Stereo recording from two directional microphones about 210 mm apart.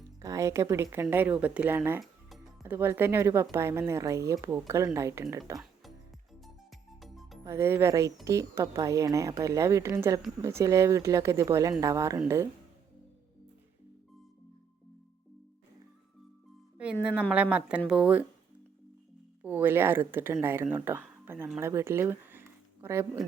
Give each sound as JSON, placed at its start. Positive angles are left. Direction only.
{"t": 0.2, "sound": "a woman's voice", "side_deg": -15}
{"t": 6.4, "sound": "music", "side_deg": 0}
{"t": 7.4, "sound": "speech", "side_deg": -10}
{"t": 16.7, "sound": "music", "side_deg": -5}
{"t": 17.2, "sound": "speech", "side_deg": -5}
{"t": 19.4, "sound": "speech", "side_deg": -10}